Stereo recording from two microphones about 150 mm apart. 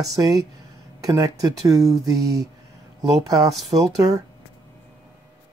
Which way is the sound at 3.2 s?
25° right (ahead or behind).